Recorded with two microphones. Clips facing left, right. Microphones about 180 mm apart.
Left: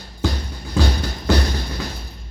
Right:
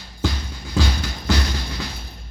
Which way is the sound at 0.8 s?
55° left (ahead or behind).